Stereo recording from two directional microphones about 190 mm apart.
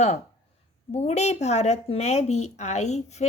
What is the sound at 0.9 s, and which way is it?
Speech, 35° left (ahead or behind).